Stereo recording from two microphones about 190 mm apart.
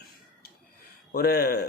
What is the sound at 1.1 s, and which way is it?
Speech, 55° left (ahead or behind).